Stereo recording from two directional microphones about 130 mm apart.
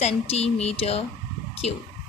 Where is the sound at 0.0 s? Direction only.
55° left (ahead or behind).